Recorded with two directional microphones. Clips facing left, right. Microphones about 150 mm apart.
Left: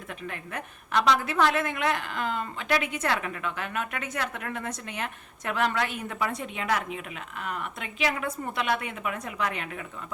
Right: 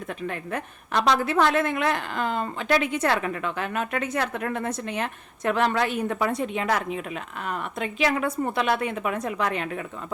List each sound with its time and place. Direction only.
0.5 s a woman's voice: 35° right (ahead or behind)